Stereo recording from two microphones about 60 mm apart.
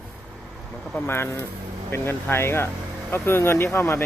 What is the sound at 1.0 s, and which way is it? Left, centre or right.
Speech, left.